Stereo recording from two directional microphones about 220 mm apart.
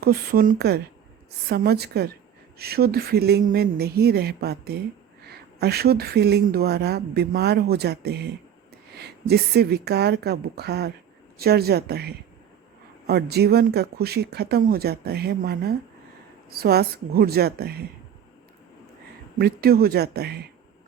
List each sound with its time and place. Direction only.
0.0 s speech: 45° right (ahead or behind)
19.4 s speech: 45° right (ahead or behind)